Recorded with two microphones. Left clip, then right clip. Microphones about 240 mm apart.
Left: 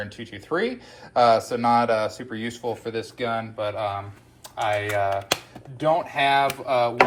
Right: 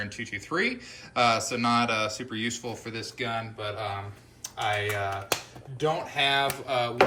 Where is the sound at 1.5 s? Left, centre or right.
Centre.